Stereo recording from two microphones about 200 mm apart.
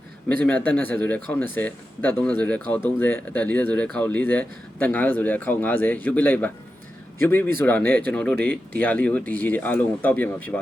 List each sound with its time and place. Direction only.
0.3 s speech: 10° left (ahead or behind)